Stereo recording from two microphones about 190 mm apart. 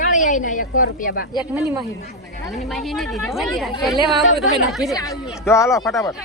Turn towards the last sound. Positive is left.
turn(degrees=15)  # may be behind; listen again after turning